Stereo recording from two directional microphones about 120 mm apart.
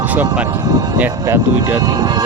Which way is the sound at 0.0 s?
15° right (ahead or behind).